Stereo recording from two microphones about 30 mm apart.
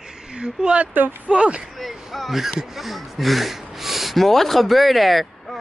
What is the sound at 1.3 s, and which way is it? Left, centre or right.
Speech, right.